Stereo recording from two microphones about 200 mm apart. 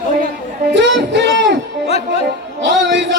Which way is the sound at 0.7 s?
60° right (ahead or behind).